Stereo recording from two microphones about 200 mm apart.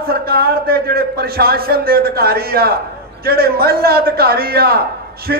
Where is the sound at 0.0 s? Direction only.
50° right (ahead or behind).